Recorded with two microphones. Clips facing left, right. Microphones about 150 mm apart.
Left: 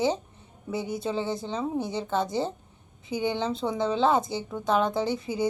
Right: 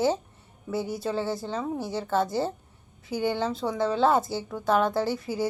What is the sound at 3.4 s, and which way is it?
A woman's voice, centre (ahead or behind).